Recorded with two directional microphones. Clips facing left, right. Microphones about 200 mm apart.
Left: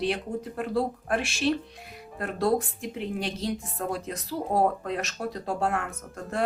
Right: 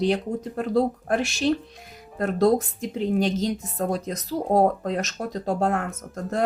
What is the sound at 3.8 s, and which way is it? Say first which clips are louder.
Speech: right 5 dB; 40° right (ahead or behind).